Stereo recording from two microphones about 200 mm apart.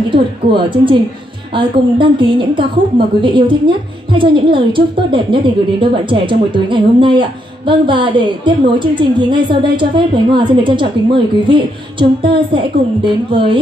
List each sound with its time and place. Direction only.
0.1 s a woman's voice: 25° right (ahead or behind)